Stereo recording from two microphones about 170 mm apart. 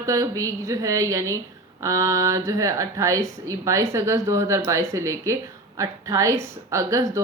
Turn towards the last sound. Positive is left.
turn(degrees=-20)  # may be behind; listen again after turning